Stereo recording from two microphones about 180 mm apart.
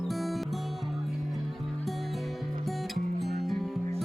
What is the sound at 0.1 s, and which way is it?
Music, centre (ahead or behind).